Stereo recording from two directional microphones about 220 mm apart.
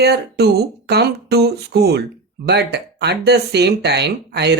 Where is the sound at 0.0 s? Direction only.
45° right (ahead or behind).